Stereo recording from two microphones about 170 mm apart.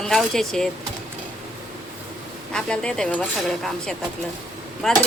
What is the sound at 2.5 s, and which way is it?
A woman's voice, 5° left (ahead or behind).